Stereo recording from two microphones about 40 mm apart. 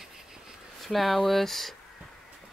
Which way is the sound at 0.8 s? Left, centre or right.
Centre.